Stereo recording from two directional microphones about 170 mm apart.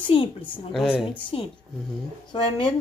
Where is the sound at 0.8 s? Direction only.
Centre (ahead or behind).